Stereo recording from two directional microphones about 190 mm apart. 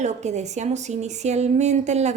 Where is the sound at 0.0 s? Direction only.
35° right (ahead or behind).